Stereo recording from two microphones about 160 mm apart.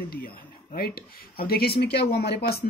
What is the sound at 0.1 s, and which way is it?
Speech, 65° left (ahead or behind).